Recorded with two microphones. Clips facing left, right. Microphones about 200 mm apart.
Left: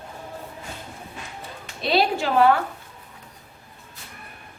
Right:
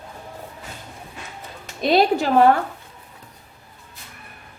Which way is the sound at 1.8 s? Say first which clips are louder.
Right 4 dB; 45° right (ahead or behind).